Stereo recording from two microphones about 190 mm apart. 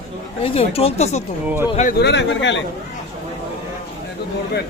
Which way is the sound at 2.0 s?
65° left (ahead or behind).